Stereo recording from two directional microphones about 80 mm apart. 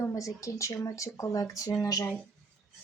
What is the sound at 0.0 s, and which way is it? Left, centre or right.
Speech, left.